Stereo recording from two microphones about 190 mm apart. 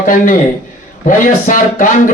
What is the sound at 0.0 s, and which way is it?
Speech, 45° left (ahead or behind).